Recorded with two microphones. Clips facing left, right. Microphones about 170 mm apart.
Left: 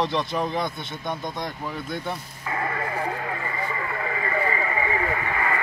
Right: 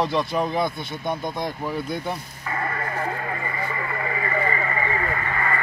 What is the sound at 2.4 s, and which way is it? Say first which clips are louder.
Radio: left 2 dB; 10° left (ahead or behind).